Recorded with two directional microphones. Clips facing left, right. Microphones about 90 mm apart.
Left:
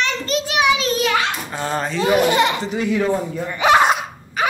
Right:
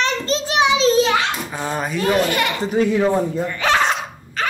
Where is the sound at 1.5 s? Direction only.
5° right (ahead or behind).